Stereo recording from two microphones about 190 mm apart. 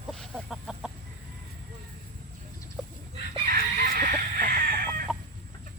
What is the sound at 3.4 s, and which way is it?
Chicken, 50° right (ahead or behind).